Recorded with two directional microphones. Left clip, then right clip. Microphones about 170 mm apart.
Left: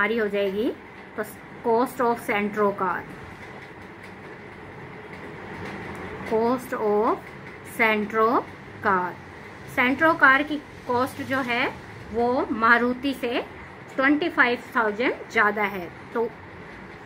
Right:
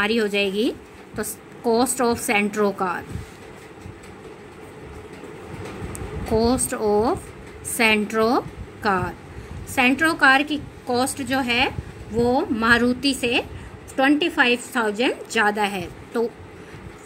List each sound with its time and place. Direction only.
0.0 s a woman's voice: 65° right (ahead or behind)
1.1 s a woman's voice: 60° right (ahead or behind)
6.4 s a woman's voice: 50° right (ahead or behind)
7.7 s a woman's voice: 55° right (ahead or behind)